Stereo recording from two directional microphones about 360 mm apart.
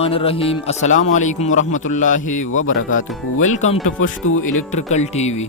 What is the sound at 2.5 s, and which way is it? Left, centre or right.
Speech, left.